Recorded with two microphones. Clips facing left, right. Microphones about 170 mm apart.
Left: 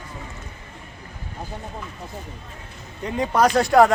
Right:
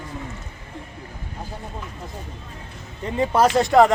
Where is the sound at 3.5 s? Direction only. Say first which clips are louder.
Even; centre (ahead or behind).